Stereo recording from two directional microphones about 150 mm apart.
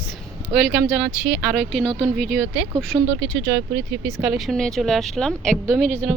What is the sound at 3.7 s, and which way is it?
Speech, 85° right.